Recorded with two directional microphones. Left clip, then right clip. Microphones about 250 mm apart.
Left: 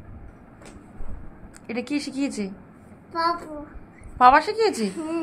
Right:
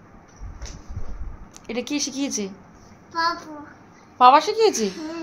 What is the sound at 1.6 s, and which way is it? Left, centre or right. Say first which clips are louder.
Speech: right 2 dB; centre.